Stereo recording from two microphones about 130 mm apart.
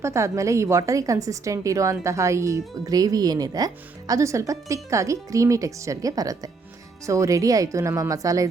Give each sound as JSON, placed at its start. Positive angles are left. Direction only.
{"t": 0.0, "sound": "a woman's voice", "side_deg": -20}